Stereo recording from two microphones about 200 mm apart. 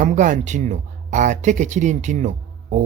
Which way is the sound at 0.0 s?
40° right (ahead or behind).